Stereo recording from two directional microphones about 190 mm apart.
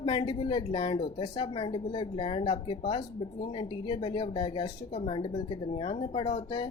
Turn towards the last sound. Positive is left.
turn(degrees=25)  # may be behind; listen again after turning